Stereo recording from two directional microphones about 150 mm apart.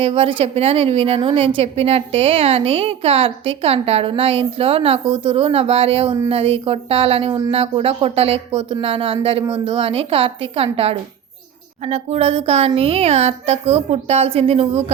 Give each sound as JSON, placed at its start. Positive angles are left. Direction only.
{"t": 0.0, "sound": "a woman's voice", "side_deg": -40}